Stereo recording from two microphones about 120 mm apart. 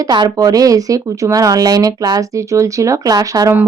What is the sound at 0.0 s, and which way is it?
Speech, 35° right (ahead or behind).